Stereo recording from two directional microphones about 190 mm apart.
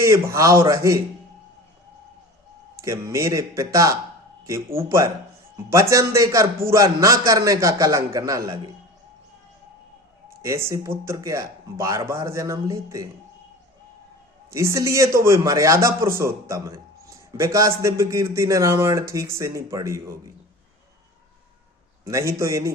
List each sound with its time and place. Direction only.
0.0 s a man's voice: 15° right (ahead or behind)
2.7 s a man's voice: 15° right (ahead or behind)
10.2 s a sound: 15° right (ahead or behind)
10.7 s a man's voice: 15° right (ahead or behind)
14.5 s a man's voice: 15° right (ahead or behind)
22.0 s a man's voice: 15° right (ahead or behind)